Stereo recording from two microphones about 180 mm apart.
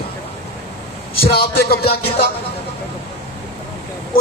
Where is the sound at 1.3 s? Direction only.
60° left (ahead or behind).